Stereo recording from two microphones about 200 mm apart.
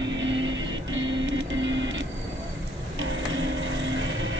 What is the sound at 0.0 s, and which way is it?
Music, 65° right (ahead or behind).